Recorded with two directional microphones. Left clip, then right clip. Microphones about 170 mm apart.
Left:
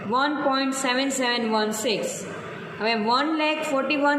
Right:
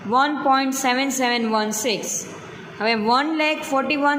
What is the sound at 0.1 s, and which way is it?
A woman's voice, 30° right (ahead or behind).